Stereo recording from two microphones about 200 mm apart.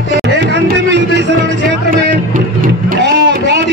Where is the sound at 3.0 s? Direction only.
60° right (ahead or behind).